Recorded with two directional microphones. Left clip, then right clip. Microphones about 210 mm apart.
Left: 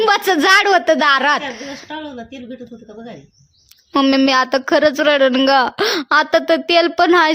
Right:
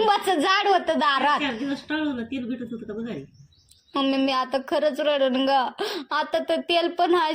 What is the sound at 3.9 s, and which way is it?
A woman's voice, 45° left (ahead or behind).